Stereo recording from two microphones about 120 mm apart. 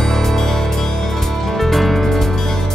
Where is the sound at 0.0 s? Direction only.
5° left (ahead or behind).